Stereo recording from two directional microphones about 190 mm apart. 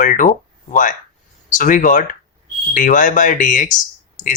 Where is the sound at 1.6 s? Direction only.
45° left (ahead or behind).